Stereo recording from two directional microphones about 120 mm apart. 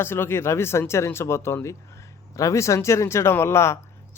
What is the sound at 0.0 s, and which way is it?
Speech, 20° left (ahead or behind).